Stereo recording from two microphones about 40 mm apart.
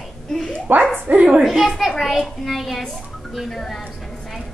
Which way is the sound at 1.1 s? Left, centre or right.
Right.